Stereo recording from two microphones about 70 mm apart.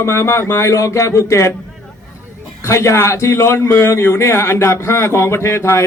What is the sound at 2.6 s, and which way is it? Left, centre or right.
A man's voice, left.